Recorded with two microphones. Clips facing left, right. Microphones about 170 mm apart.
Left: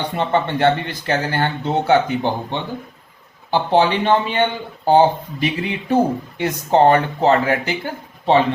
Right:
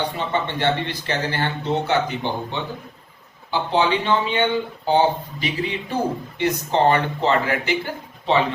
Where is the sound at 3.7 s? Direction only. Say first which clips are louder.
Left 4 dB; 50° left (ahead or behind).